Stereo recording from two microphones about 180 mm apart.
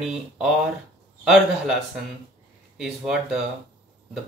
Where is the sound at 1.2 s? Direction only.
Centre (ahead or behind).